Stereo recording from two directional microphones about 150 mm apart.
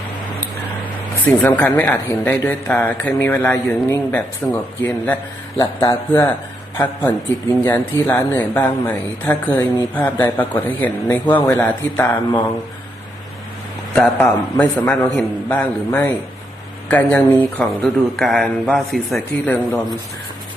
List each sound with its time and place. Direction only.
1.2 s speech: 10° left (ahead or behind)
13.9 s a man's voice: 5° left (ahead or behind)